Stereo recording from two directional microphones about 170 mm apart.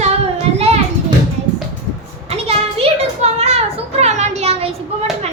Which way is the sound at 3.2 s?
40° right (ahead or behind).